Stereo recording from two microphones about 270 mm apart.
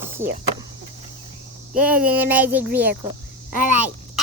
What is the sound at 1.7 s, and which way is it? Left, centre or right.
Speech, centre.